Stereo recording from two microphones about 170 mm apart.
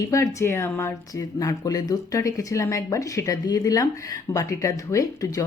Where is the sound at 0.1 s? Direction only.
15° left (ahead or behind).